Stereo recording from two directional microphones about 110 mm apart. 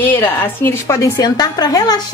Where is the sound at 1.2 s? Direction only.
40° left (ahead or behind).